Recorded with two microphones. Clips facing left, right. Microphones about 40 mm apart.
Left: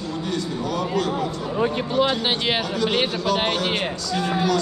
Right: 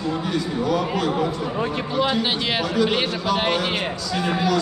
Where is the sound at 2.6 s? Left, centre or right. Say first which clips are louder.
Right 1 dB; centre.